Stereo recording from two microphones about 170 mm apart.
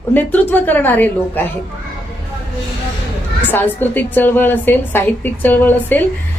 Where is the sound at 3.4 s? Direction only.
10° left (ahead or behind).